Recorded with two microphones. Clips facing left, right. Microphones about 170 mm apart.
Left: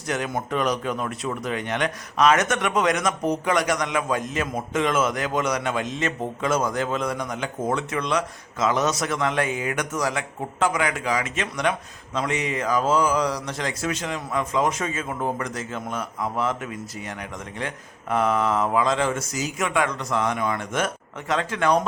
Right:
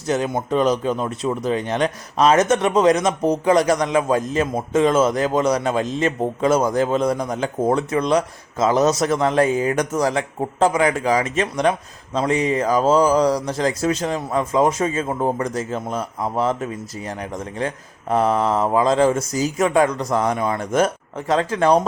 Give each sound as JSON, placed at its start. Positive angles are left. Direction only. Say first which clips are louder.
{"t": 0.1, "sound": "a man's voice", "louder": "right 6 dB", "side_deg": -30}
{"t": 18.1, "sound": "a man's voice", "louder": "right 4 dB", "side_deg": -35}